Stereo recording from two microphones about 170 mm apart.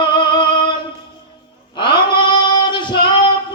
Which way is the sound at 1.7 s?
30° left (ahead or behind).